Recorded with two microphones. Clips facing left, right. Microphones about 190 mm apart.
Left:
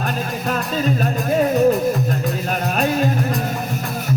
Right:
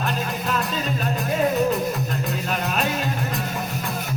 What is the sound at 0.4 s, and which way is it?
Music, 45° left (ahead or behind).